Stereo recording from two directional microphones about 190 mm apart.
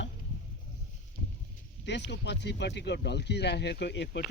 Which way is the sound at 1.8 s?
65° left (ahead or behind).